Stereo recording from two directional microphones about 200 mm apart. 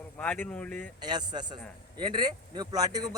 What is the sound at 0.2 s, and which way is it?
Speech, 5° left (ahead or behind).